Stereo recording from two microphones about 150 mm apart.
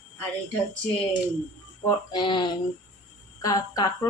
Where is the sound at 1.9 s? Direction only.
30° left (ahead or behind).